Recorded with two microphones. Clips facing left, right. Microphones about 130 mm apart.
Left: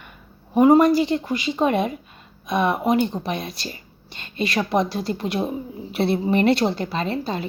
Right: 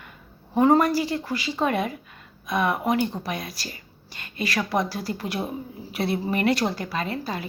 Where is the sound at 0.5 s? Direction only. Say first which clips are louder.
Left 5 dB; 15° left (ahead or behind).